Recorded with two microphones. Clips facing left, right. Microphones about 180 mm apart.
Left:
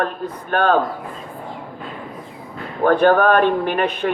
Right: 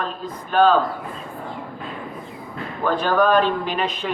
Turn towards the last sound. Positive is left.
turn(degrees=60)  # may be behind; listen again after turning